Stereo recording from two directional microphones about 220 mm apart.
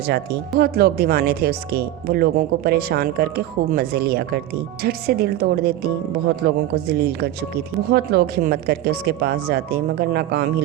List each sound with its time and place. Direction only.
0.1 s speech: 50° right (ahead or behind)